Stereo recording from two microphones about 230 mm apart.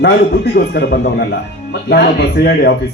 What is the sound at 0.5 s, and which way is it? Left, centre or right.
Speech, left.